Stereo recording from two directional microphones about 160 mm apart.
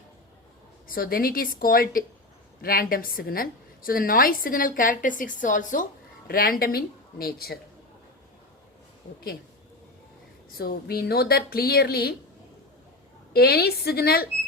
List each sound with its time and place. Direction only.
0.9 s a woman's voice: 65° left (ahead or behind)
6.2 s speech: 65° left (ahead or behind)
10.6 s speech: 70° left (ahead or behind)
13.3 s speech: 75° left (ahead or behind)